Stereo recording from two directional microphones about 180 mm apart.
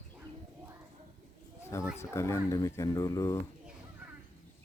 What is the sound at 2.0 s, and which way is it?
Speech, 15° left (ahead or behind).